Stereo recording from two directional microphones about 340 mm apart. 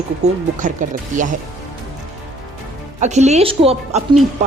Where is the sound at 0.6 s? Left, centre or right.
Right.